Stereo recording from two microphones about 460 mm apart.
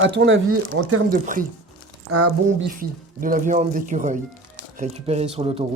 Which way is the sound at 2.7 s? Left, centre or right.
Centre.